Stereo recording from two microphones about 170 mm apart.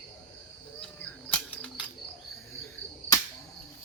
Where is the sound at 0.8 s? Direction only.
10° left (ahead or behind).